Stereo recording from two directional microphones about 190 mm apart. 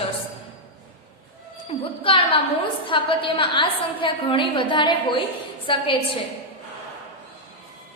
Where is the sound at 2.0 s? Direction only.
30° left (ahead or behind).